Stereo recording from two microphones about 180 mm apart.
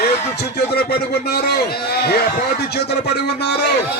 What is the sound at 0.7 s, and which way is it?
A man's voice, 65° left (ahead or behind).